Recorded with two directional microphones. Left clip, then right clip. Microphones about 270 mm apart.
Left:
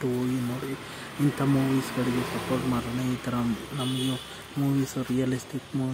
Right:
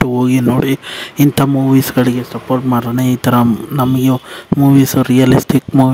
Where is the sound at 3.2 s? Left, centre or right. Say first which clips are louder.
Right 18 dB; right.